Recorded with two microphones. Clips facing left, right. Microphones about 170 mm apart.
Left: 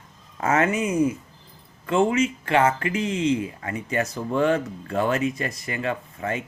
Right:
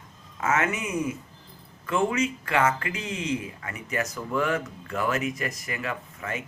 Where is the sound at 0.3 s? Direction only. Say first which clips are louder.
Left 5 dB; 35° left (ahead or behind).